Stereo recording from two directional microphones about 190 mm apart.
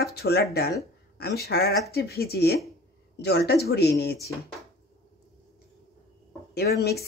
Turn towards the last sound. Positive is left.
turn(degrees=55)  # may be behind; listen again after turning